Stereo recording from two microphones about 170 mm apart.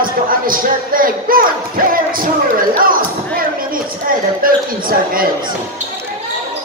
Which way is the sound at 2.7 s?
55° right (ahead or behind).